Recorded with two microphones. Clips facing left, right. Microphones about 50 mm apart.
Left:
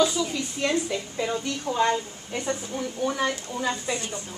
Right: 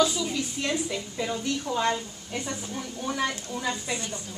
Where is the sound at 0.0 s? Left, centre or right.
Centre.